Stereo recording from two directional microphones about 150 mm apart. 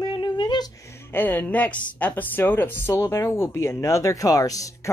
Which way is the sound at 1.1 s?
15° left (ahead or behind).